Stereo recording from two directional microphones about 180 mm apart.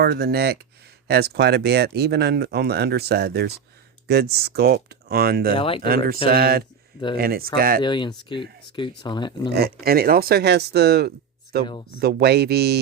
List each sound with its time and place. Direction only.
0.0 s speech: 65° right (ahead or behind)
5.5 s speech: 30° left (ahead or behind)
5.8 s speech: 55° right (ahead or behind)
7.8 s speech: 25° left (ahead or behind)
9.5 s speech: 60° right (ahead or behind)
11.6 s speech: 25° left (ahead or behind)
11.9 s speech: 60° right (ahead or behind)